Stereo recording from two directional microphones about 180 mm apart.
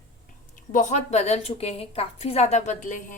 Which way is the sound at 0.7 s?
45° left (ahead or behind).